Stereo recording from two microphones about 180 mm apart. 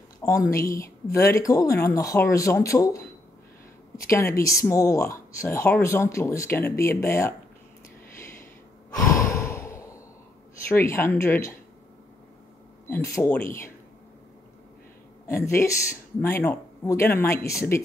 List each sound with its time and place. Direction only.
0.2 s speech: 15° left (ahead or behind)
8.9 s sigh: 20° left (ahead or behind)
10.7 s speech: 15° left (ahead or behind)
12.9 s speech: 15° left (ahead or behind)
15.2 s speech: 15° left (ahead or behind)